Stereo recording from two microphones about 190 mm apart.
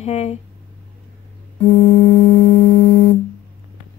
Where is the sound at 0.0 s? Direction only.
35° left (ahead or behind).